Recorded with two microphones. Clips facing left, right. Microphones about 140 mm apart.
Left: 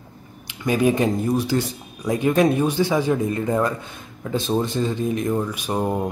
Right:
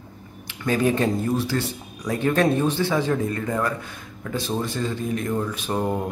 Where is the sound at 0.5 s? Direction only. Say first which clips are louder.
Left 2 dB; 15° left (ahead or behind).